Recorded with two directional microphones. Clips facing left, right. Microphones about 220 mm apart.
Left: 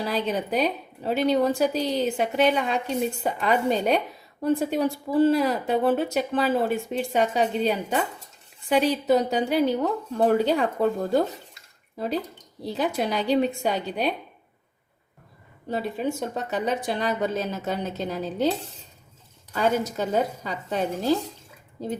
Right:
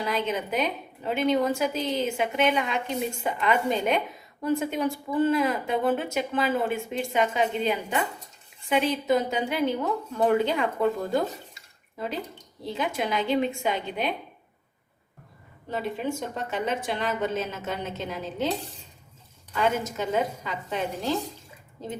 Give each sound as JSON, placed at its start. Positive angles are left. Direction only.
{"t": 0.0, "sound": "a woman's voice", "side_deg": 35}
{"t": 16.5, "sound": "a woman's voice", "side_deg": 40}
{"t": 19.5, "sound": "a woman's voice", "side_deg": 35}